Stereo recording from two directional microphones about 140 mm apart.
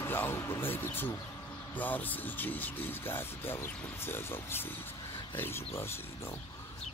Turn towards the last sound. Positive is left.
turn(degrees=15)  # may be behind; listen again after turning